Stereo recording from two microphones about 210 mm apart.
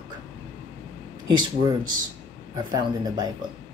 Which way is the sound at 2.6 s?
20° right (ahead or behind).